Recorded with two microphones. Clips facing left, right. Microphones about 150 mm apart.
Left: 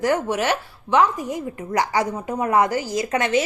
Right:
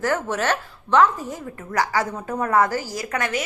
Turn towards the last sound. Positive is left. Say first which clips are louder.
# left 5 dB
turn(degrees=25)  # may be behind; listen again after turning